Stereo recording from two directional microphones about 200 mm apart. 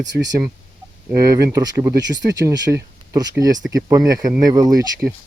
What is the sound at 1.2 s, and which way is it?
Speech, 15° right (ahead or behind).